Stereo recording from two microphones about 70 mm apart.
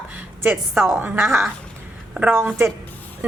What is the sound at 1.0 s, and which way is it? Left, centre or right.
Speech, right.